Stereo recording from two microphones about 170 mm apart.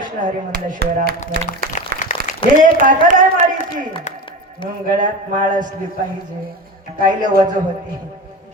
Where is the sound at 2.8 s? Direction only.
50° right (ahead or behind).